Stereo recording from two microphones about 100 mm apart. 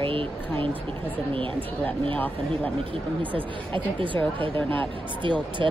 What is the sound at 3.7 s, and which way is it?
Speech, 60° right (ahead or behind).